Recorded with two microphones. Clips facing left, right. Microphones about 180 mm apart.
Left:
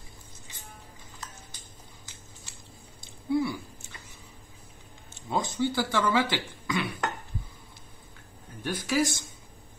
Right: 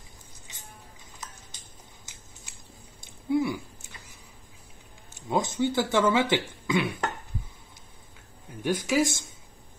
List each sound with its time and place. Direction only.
3.3 s a sound: 20° right (ahead or behind)
5.3 s speech: 20° right (ahead or behind)
8.6 s speech: 10° right (ahead or behind)